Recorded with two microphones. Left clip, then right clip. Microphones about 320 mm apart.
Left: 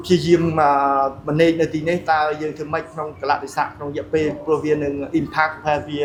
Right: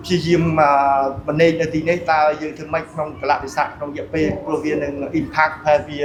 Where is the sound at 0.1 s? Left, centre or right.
Left.